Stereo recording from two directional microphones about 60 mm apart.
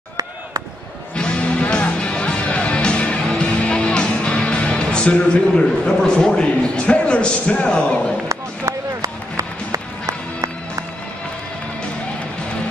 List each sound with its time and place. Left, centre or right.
1.1 s music: centre
8.3 s run: right